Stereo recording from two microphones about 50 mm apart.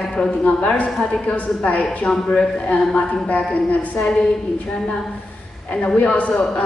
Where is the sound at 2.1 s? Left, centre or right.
Centre.